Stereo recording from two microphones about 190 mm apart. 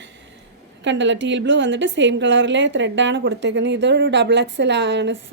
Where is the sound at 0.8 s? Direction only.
70° right (ahead or behind).